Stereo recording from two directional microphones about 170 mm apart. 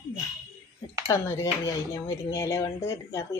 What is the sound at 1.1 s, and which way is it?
Speech, 20° left (ahead or behind).